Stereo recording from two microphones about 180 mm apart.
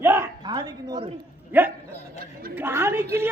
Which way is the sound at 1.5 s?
10° right (ahead or behind).